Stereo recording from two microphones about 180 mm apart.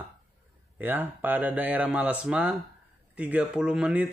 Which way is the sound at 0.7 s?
10° right (ahead or behind).